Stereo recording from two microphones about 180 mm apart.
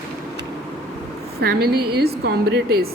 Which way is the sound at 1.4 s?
60° right (ahead or behind).